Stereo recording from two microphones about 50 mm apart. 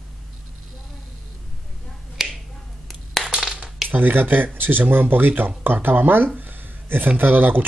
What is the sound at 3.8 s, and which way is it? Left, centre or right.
Speech, right.